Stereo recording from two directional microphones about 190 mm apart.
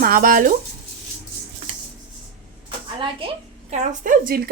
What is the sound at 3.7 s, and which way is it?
Speech, 40° right (ahead or behind).